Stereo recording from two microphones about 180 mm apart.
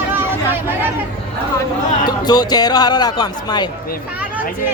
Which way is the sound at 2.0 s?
20° left (ahead or behind).